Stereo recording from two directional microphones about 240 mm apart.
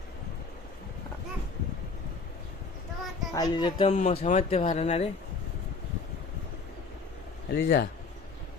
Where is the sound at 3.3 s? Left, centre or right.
Centre.